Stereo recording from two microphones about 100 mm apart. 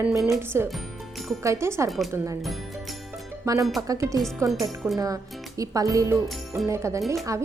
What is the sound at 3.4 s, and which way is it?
Speech, 35° right (ahead or behind).